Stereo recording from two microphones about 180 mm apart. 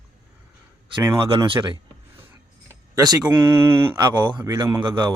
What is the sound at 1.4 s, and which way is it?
Speech, 25° right (ahead or behind).